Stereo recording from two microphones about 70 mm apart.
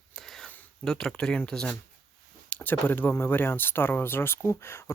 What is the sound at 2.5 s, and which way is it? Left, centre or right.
Speech, left.